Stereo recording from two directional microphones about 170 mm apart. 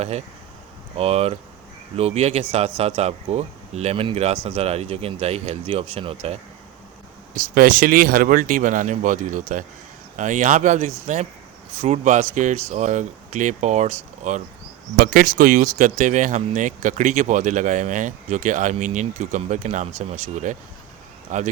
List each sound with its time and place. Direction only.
0.0 s speech: 40° right (ahead or behind)
7.3 s speech: 55° right (ahead or behind)
14.9 s speech: 55° right (ahead or behind)